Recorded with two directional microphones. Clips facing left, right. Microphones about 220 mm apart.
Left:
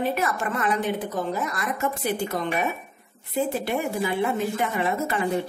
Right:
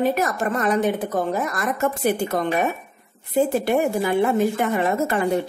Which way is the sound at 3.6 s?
50° right (ahead or behind).